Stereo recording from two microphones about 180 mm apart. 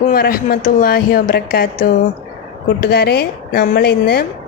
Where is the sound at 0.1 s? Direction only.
55° left (ahead or behind).